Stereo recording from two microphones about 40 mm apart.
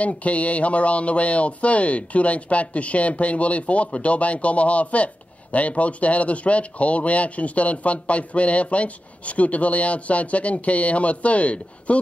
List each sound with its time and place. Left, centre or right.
0.0 s speech: left